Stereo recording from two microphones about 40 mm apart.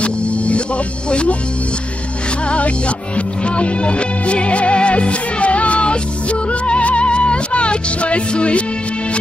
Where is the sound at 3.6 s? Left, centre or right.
Left.